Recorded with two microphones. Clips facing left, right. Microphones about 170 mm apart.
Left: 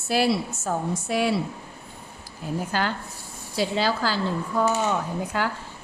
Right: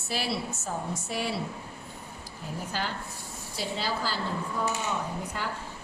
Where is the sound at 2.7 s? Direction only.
70° left (ahead or behind).